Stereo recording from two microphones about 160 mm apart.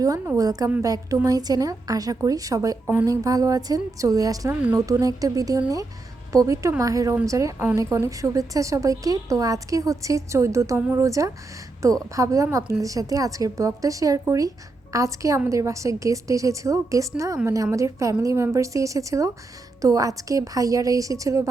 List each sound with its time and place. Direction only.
0.0 s a woman's voice: 20° right (ahead or behind)